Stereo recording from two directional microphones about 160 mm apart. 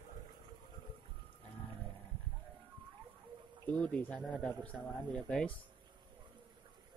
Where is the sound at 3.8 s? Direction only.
10° left (ahead or behind).